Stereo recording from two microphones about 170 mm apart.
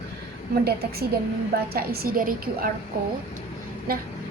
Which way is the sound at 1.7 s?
60° right (ahead or behind).